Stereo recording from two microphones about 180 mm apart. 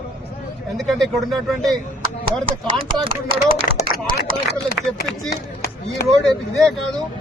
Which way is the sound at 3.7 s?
50° left (ahead or behind).